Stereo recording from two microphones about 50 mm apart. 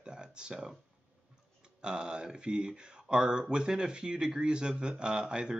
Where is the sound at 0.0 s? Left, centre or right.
Centre.